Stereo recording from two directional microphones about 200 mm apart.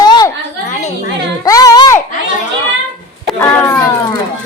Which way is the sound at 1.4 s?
15° left (ahead or behind).